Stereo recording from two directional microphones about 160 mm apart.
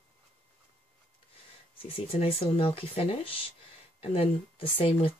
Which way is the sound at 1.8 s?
35° left (ahead or behind).